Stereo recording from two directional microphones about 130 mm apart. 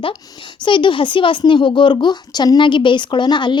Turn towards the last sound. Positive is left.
turn(degrees=35)  # may be behind; listen again after turning